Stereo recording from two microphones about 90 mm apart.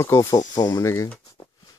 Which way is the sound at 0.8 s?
30° left (ahead or behind).